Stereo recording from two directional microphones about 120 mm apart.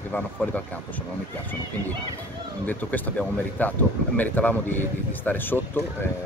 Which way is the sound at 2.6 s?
15° left (ahead or behind).